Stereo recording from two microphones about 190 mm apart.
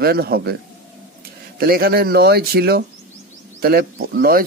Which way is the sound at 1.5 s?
50° right (ahead or behind).